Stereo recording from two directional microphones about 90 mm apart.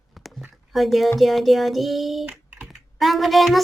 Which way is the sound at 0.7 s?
Centre (ahead or behind).